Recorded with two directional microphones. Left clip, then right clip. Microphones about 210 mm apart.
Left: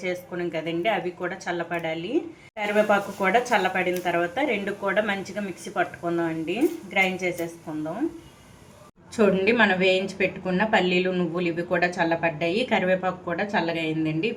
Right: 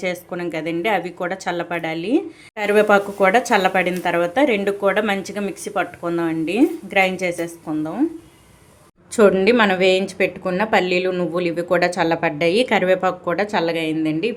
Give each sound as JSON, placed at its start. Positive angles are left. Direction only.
{"t": 0.0, "sound": "speech", "side_deg": -50}
{"t": 9.1, "sound": "a woman's voice", "side_deg": -40}